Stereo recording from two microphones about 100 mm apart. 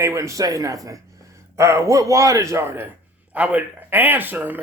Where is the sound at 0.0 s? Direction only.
30° right (ahead or behind).